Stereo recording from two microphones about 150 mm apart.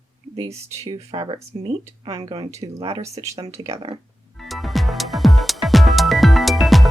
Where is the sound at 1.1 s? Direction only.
40° right (ahead or behind).